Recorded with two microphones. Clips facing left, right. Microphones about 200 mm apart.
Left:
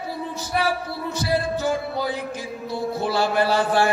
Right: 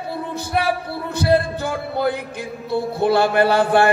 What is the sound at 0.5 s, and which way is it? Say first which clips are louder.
Mantra: right 2 dB; 60° right (ahead or behind).